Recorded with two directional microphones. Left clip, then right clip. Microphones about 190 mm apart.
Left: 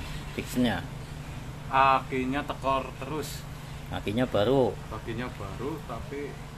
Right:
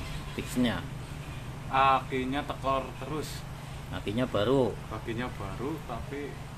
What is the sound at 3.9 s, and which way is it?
Speech, 35° left (ahead or behind).